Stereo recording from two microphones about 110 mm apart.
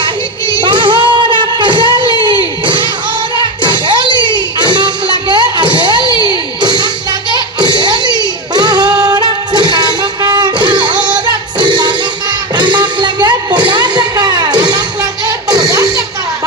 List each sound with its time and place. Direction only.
0.0 s music: 45° right (ahead or behind)